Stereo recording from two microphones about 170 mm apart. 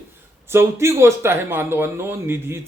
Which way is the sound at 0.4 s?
15° right (ahead or behind).